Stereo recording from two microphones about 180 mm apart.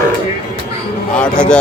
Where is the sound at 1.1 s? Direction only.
5° left (ahead or behind).